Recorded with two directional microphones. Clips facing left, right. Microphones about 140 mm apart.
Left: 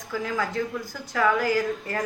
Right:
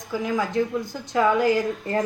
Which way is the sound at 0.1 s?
20° right (ahead or behind).